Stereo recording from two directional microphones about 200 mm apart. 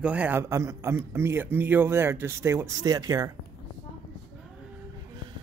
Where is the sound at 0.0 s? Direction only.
5° right (ahead or behind).